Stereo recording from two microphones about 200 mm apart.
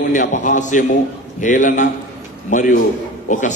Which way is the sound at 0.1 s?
40° left (ahead or behind).